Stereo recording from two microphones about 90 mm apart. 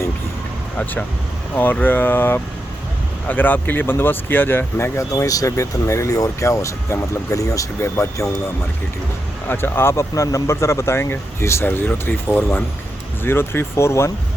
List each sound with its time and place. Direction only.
1.5 s speech: 20° left (ahead or behind)
9.5 s speech: 25° left (ahead or behind)